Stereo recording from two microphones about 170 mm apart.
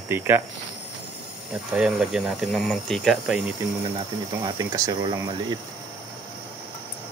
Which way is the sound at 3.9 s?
25° right (ahead or behind).